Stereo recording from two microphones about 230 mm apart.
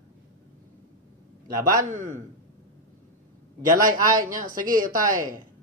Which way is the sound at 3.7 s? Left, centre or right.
Right.